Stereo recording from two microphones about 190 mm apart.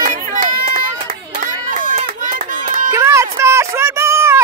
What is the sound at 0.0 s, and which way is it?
Run, 45° right (ahead or behind).